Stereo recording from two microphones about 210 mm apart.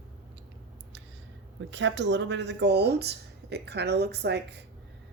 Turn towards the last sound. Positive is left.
turn(degrees=-50)  # may be behind; listen again after turning